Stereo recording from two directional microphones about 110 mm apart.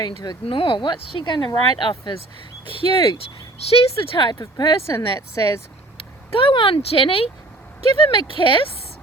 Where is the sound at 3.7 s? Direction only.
65° left (ahead or behind); by 4.7 s 40° left (ahead or behind).